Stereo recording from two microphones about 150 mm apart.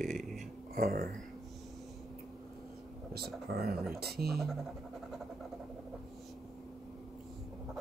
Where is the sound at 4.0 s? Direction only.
90° right.